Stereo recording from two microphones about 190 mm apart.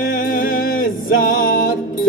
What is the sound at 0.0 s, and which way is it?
Music, 50° left (ahead or behind).